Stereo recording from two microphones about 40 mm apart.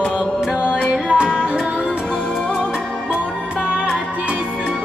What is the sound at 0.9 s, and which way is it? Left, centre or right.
Music, right.